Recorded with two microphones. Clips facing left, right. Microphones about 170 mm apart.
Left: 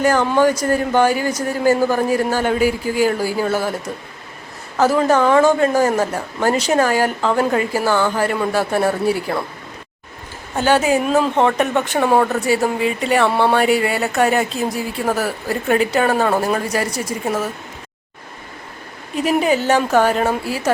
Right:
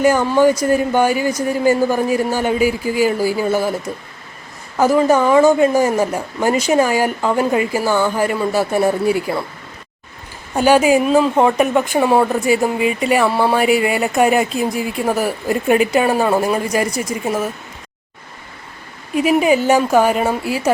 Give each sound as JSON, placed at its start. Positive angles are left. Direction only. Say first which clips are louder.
{"t": 0.0, "sound": "a man's voice", "louder": "right 2 dB", "side_deg": -10}
{"t": 2.6, "sound": "speech", "louder": "right 1 dB", "side_deg": 45}
{"t": 3.0, "sound": "a man's voice", "louder": "right 1 dB", "side_deg": -10}
{"t": 4.8, "sound": "a man's voice", "louder": "right 2 dB", "side_deg": -10}
{"t": 10.6, "sound": "a man's voice", "louder": "right 3 dB", "side_deg": -10}
{"t": 19.1, "sound": "a man's voice", "louder": "right 3 dB", "side_deg": -10}